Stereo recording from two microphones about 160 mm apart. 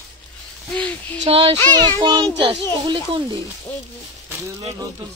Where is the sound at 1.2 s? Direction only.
35° right (ahead or behind).